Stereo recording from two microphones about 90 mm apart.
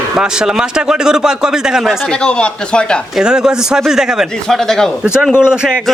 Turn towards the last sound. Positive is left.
turn(degrees=-10)  # may be behind; listen again after turning